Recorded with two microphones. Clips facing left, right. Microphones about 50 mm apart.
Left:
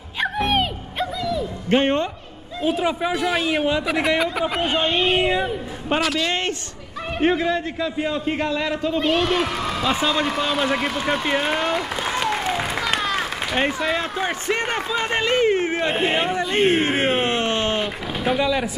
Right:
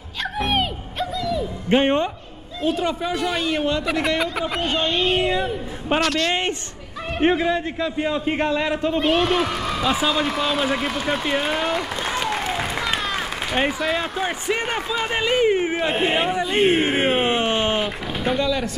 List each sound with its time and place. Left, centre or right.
0.4 s music: centre
1.3 s music: centre
2.6 s speech: centre
4.6 s speech: centre
5.9 s speech: centre
7.2 s a man's voice: centre
8.4 s a man's voice: right
9.0 s speech: centre
11.2 s applause: centre
12.8 s a man's voice: centre
17.8 s speech: centre
18.4 s speech: centre